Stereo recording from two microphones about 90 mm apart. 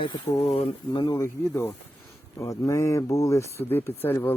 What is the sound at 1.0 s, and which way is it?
Speech, 45° left (ahead or behind).